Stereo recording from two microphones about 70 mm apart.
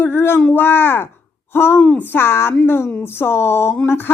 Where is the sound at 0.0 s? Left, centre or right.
Left.